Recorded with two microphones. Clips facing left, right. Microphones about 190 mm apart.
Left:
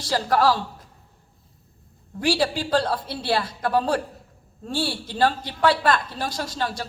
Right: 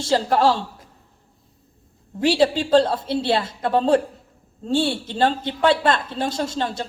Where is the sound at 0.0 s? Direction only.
25° right (ahead or behind).